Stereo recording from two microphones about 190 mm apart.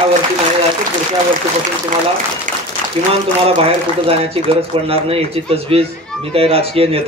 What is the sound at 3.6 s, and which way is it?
A man's voice, 30° right (ahead or behind).